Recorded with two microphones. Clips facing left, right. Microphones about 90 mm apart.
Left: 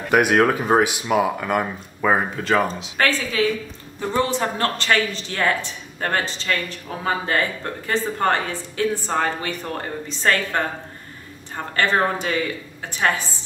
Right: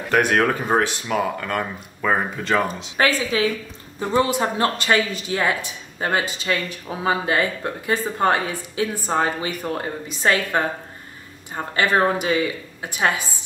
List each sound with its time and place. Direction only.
0.1 s speech: 10° left (ahead or behind)
3.0 s a woman's voice: 20° right (ahead or behind)